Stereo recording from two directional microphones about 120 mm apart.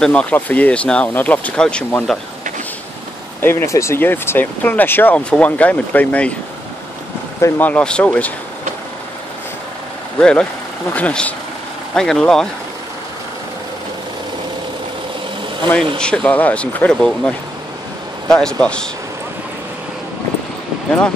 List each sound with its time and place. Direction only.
0.0 s speech: 10° left (ahead or behind)
3.3 s speech: 20° left (ahead or behind)
7.3 s speech: 20° left (ahead or behind)
10.1 s speech: 10° left (ahead or behind)
16.0 s speech: 10° left (ahead or behind)